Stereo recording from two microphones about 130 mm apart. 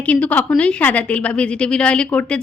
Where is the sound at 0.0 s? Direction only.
10° left (ahead or behind).